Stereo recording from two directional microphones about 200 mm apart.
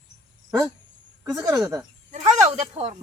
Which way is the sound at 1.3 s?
5° right (ahead or behind).